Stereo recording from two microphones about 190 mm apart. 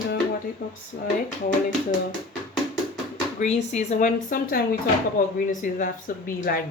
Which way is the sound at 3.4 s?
35° left (ahead or behind).